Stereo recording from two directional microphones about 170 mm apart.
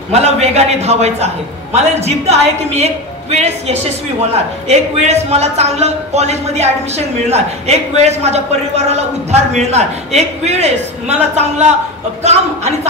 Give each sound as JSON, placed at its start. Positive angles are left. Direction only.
{"t": 0.1, "sound": "a man's voice", "side_deg": -40}